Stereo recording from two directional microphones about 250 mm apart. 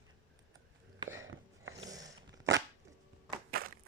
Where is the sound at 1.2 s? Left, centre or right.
Right.